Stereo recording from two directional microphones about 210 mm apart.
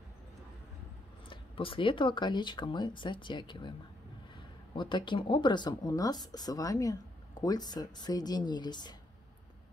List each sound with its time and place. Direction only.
1.3 s speech: 25° left (ahead or behind)
4.7 s speech: 20° left (ahead or behind)